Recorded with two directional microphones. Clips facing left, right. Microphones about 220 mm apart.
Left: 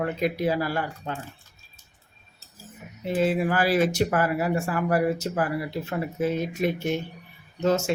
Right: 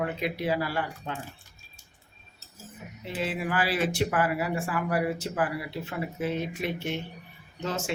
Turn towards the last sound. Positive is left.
turn(degrees=40)  # may be behind; listen again after turning